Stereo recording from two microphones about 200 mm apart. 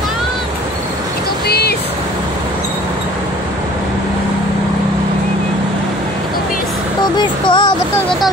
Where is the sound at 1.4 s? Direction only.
50° left (ahead or behind).